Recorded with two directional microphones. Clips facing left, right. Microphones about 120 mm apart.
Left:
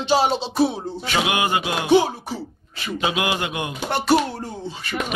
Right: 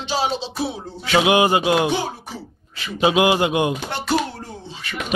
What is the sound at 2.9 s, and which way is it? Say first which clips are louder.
Speech: right 7 dB; 25° right (ahead or behind).